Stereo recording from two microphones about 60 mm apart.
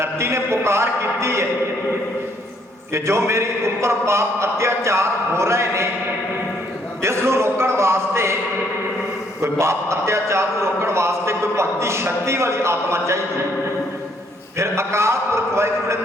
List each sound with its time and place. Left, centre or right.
0.0 s a man's voice: right
2.9 s a man's voice: right
7.0 s a man's voice: right
9.4 s a man's voice: right
14.6 s a man's voice: right